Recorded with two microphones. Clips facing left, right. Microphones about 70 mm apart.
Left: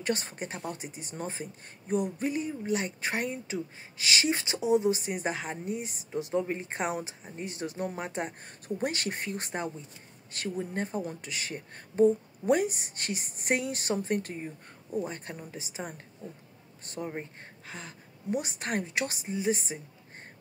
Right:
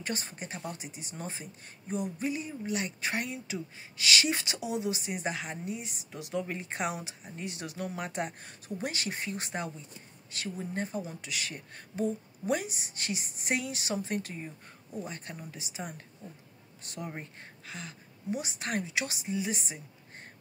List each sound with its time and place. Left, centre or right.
0.0 s speech: left